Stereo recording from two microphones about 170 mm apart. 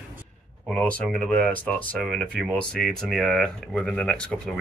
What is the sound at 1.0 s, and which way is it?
Speech, 5° left (ahead or behind).